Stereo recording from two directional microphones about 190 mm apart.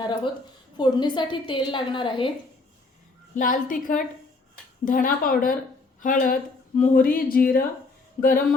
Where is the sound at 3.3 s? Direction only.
45° left (ahead or behind).